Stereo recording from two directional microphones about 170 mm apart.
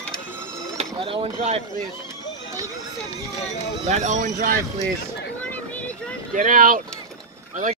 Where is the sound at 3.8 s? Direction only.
45° right (ahead or behind).